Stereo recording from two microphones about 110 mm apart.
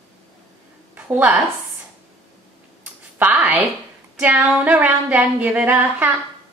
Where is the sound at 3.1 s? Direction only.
15° right (ahead or behind).